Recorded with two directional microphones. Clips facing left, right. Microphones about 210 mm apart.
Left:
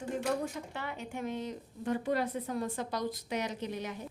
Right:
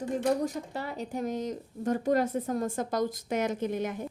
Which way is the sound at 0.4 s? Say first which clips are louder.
Right 5 dB; 40° right (ahead or behind).